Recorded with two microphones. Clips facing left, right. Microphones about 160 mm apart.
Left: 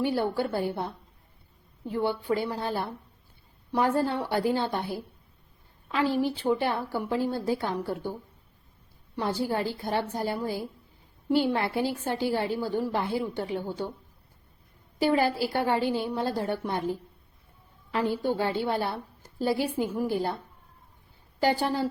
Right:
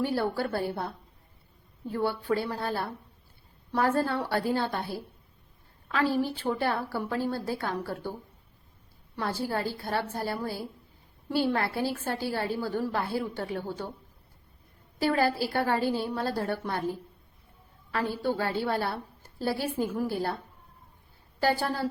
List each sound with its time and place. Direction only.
0.2 s a woman's voice: 15° left (ahead or behind)
3.9 s a woman's voice: 15° left (ahead or behind)
9.1 s a woman's voice: 15° left (ahead or behind)
15.0 s a woman's voice: 15° left (ahead or behind)
17.9 s a woman's voice: 15° left (ahead or behind)
21.4 s a woman's voice: 15° left (ahead or behind)